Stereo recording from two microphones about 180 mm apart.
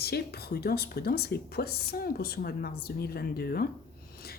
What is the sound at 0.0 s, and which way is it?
Speech, 60° left (ahead or behind).